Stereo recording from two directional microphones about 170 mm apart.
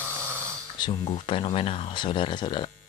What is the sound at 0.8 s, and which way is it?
Speech, 25° left (ahead or behind).